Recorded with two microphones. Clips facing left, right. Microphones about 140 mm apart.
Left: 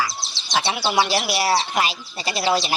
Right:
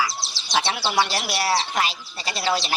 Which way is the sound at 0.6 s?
10° left (ahead or behind).